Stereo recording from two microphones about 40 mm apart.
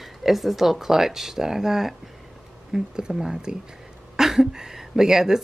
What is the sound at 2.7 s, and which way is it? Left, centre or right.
Speech, right.